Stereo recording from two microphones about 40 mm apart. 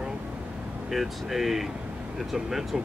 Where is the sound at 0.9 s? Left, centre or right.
Centre.